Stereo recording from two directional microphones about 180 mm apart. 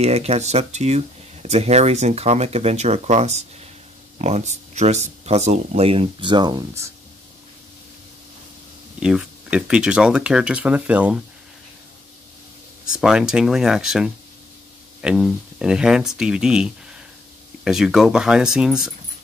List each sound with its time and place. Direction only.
0.0 s speech: 35° right (ahead or behind); by 6.9 s 15° right (ahead or behind)
9.0 s speech: 5° right (ahead or behind)
12.8 s speech: 5° right (ahead or behind)